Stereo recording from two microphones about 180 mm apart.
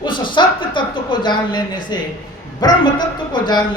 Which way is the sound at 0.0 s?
25° left (ahead or behind).